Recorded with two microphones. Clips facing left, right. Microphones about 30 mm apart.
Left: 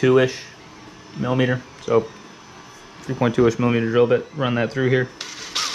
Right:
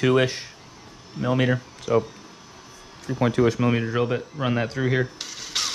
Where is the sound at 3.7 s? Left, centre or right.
Centre.